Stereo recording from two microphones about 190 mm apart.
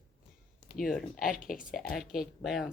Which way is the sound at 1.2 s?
45° left (ahead or behind).